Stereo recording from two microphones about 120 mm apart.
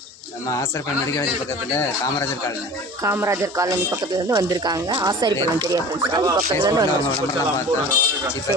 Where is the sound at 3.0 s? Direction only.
25° right (ahead or behind).